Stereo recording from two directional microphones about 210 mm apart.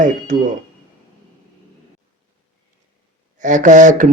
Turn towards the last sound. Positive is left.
turn(degrees=-35)  # may be behind; listen again after turning